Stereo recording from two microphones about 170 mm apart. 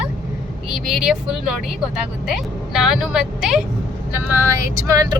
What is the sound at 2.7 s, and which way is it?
Speech, centre (ahead or behind).